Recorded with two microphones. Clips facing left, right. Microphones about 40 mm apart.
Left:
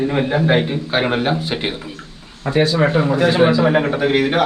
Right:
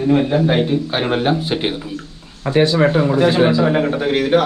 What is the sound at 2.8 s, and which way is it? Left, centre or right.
Speech, centre.